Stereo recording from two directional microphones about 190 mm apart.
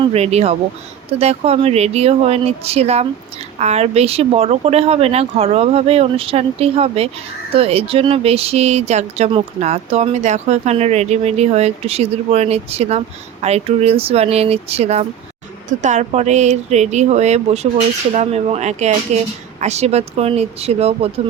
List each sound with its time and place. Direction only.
0.0 s speech: 35° right (ahead or behind)